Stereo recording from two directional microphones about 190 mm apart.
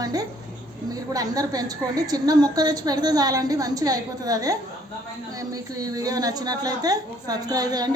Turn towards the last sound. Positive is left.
turn(degrees=-20)  # may be behind; listen again after turning